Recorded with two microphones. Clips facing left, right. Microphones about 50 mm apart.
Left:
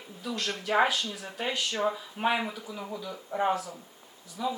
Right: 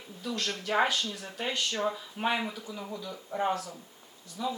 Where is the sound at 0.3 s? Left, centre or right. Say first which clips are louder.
Left 1 dB; centre.